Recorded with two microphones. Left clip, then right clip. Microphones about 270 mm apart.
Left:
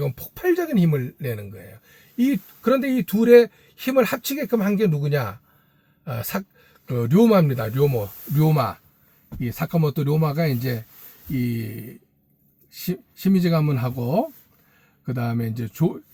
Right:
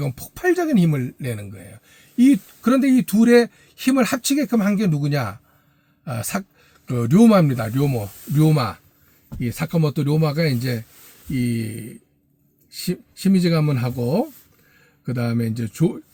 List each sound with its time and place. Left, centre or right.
0.0 s speech: centre